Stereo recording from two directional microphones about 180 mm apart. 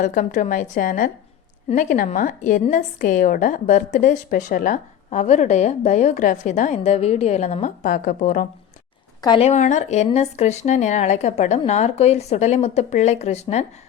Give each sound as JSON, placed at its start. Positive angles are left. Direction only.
{"t": 0.0, "sound": "a woman's voice", "side_deg": 45}
{"t": 9.2, "sound": "speech", "side_deg": 25}
{"t": 9.5, "sound": "speech", "side_deg": 40}